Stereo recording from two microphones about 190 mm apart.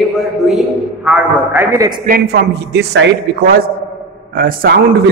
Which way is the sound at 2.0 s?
55° right (ahead or behind).